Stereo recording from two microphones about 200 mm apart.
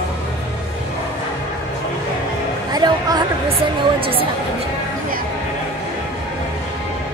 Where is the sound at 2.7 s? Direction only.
20° right (ahead or behind).